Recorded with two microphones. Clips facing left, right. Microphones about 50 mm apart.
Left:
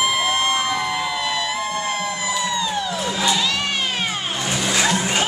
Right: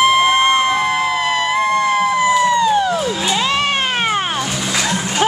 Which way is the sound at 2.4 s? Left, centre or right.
Right.